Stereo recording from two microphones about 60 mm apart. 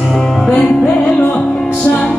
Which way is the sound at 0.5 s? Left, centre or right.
Centre.